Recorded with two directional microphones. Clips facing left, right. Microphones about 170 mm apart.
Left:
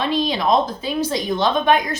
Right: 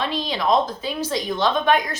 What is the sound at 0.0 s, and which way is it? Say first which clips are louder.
A woman's voice: left 4 dB; 15° left (ahead or behind).